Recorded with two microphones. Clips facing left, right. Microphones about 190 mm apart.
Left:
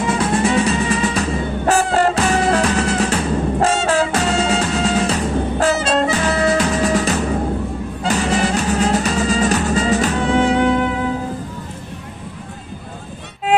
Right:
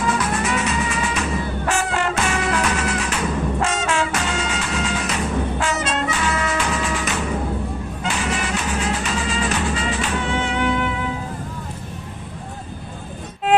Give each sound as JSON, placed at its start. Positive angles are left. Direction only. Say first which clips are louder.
{"t": 0.0, "sound": "music", "louder": "left 4 dB", "side_deg": 30}